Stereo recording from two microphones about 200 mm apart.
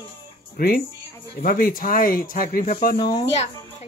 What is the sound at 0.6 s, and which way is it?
Speech, 50° left (ahead or behind).